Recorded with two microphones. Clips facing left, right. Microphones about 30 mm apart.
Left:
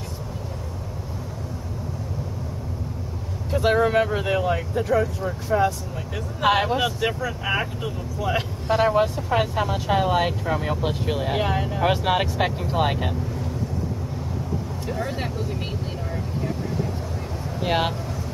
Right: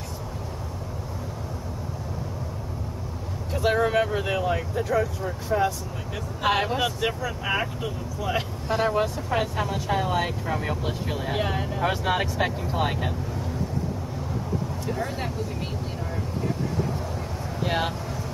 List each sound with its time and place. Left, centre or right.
3.5 s speech: centre
10.9 s speech: centre
14.9 s speech: centre
17.6 s speech: centre